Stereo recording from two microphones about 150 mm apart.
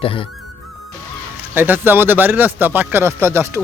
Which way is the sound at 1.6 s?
15° right (ahead or behind).